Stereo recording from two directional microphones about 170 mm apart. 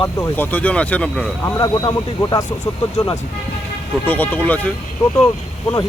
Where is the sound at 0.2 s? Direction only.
10° left (ahead or behind).